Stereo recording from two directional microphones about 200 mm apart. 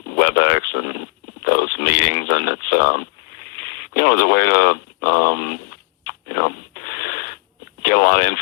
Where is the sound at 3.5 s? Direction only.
50° left (ahead or behind).